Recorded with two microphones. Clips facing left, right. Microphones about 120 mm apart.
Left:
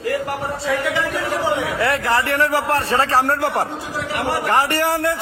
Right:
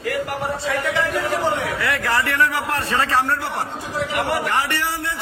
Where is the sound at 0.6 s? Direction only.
Centre (ahead or behind).